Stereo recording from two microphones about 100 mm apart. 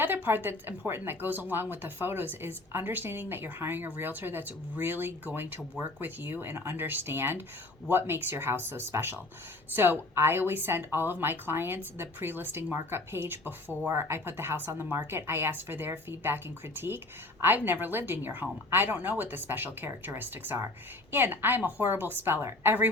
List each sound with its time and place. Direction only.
0.0 s a woman's voice: 20° right (ahead or behind)